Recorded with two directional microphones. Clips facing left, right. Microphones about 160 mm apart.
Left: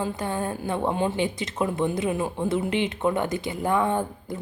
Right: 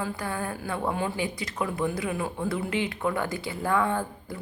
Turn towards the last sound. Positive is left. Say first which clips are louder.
# left 3 dB
turn(degrees=20)  # may be behind; listen again after turning